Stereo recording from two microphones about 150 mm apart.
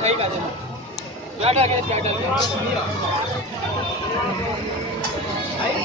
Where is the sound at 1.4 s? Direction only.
45° right (ahead or behind).